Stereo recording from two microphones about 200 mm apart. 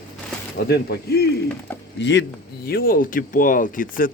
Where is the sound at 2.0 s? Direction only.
60° left (ahead or behind).